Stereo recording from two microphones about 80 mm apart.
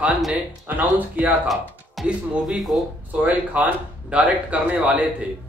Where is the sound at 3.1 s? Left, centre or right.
Centre.